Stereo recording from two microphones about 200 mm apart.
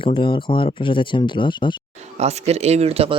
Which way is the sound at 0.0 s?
25° left (ahead or behind).